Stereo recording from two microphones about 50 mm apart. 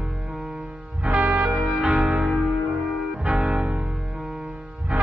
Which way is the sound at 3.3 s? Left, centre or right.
Centre.